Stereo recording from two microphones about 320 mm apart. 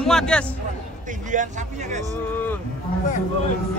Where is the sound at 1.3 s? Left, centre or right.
Right.